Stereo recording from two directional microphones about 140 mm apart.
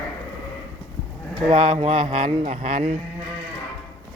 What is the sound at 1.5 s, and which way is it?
A man's voice, 40° right (ahead or behind).